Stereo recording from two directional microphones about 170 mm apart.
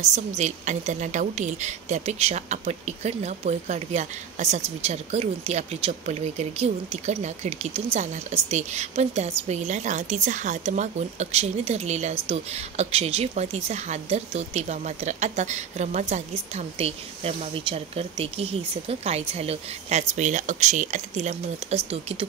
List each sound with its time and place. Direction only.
0.0 s a woman's voice: 45° right (ahead or behind)